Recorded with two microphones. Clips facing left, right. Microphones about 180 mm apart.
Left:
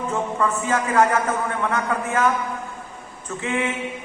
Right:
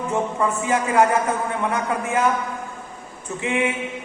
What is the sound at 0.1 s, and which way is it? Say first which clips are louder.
A man's voice: right 1 dB; 20° right (ahead or behind).